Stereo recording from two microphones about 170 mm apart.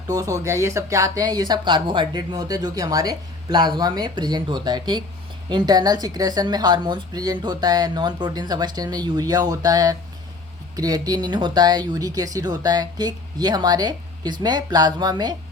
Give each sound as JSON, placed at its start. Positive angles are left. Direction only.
{"t": 0.1, "sound": "speech", "side_deg": -20}